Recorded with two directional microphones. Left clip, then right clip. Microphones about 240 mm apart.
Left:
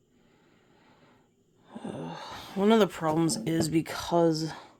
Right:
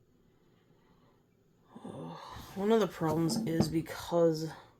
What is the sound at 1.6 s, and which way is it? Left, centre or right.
Speech, left.